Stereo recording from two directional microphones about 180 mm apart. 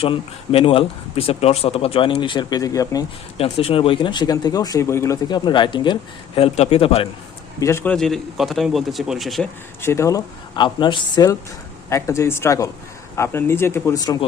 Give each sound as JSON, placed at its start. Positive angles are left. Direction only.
{"t": 0.0, "sound": "speech", "side_deg": 30}
{"t": 3.3, "sound": "speech", "side_deg": 35}
{"t": 7.6, "sound": "speech", "side_deg": 15}
{"t": 7.9, "sound": "speech", "side_deg": 0}
{"t": 9.8, "sound": "speech", "side_deg": 15}